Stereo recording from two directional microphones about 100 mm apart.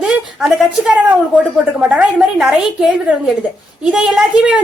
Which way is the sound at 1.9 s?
10° right (ahead or behind).